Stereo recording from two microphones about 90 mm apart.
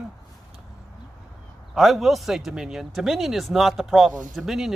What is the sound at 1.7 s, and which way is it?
Speech, centre (ahead or behind).